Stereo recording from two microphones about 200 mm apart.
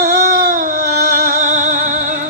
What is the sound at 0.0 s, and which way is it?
Music, 45° right (ahead or behind).